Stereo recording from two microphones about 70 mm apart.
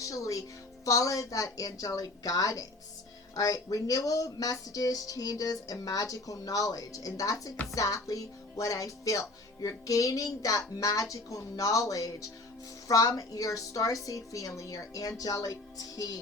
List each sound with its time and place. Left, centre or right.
0.0 s a woman's voice: left